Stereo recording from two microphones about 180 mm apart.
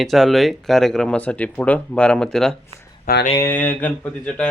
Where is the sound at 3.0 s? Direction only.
55° left (ahead or behind).